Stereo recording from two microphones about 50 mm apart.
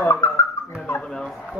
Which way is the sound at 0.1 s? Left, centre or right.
Left.